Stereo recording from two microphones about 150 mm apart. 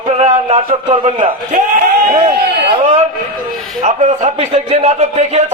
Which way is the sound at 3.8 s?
50° right (ahead or behind).